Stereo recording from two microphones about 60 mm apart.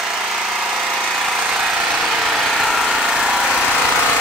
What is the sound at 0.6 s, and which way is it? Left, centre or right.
Engine, centre.